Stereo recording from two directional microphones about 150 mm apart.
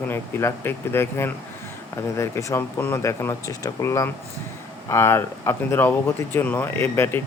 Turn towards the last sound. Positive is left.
turn(degrees=15)  # may be behind; listen again after turning